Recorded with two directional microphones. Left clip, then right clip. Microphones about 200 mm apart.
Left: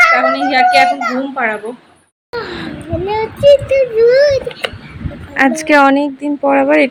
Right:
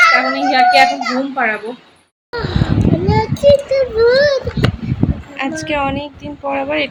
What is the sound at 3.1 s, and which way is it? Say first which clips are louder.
Child singing: left 3 dB; 10° right (ahead or behind).